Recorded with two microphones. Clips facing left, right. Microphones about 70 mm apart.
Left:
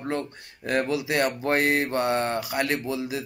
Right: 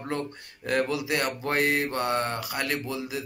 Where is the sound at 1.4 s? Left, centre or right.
Left.